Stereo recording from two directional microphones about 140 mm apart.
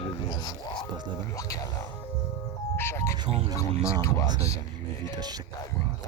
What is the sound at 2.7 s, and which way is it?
Speech, 20° left (ahead or behind).